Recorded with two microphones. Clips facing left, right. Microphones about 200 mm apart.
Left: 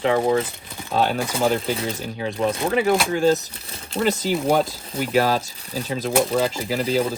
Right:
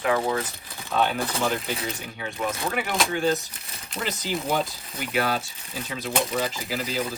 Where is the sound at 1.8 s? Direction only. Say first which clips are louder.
Left 6 dB; 30° left (ahead or behind).